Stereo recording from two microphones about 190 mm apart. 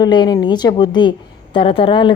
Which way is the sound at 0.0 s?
25° left (ahead or behind).